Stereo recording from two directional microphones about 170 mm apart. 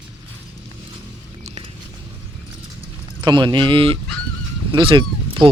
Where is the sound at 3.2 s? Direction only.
25° right (ahead or behind).